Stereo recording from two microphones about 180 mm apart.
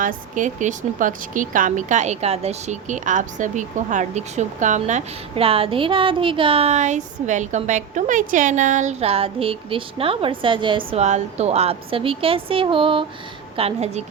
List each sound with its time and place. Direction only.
0.0 s a woman's voice: 45° right (ahead or behind)